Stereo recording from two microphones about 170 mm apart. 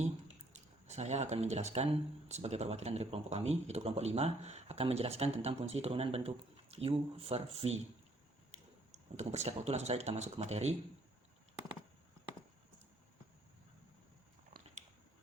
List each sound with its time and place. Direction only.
0.5 s speech: 40° right (ahead or behind)
9.1 s speech: 40° right (ahead or behind)